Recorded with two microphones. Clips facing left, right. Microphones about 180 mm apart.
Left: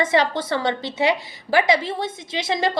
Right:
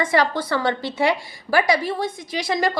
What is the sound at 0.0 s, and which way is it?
A woman's voice, 25° left (ahead or behind).